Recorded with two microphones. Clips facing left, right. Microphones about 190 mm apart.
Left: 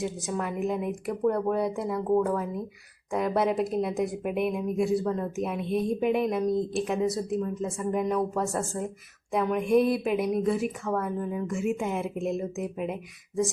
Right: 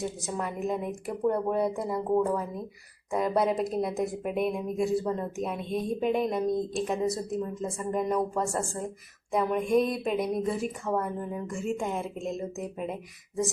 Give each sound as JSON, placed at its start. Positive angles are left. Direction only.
{"t": 0.3, "sound": "speech", "side_deg": 0}
{"t": 6.4, "sound": "speech", "side_deg": -20}
{"t": 6.8, "sound": "a woman's voice", "side_deg": 0}
{"t": 12.1, "sound": "speech", "side_deg": 60}
{"t": 12.5, "sound": "speech", "side_deg": 5}